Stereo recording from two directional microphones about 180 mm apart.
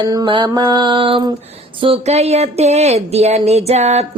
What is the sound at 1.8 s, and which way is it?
Speech, 35° right (ahead or behind).